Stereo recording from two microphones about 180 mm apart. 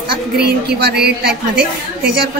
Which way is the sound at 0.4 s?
65° right (ahead or behind).